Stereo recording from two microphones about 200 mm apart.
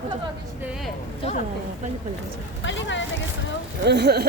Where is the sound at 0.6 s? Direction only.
5° right (ahead or behind).